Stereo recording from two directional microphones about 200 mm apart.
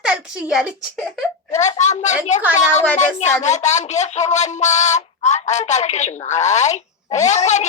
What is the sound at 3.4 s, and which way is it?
Speech, 35° left (ahead or behind).